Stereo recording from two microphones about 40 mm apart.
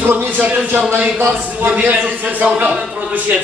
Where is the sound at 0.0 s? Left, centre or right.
Right.